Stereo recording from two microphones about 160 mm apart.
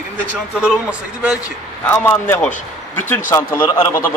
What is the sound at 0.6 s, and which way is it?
Speech, 5° right (ahead or behind).